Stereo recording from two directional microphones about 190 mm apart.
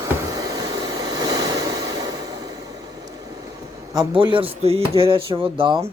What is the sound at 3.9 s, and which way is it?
Speech, 25° right (ahead or behind).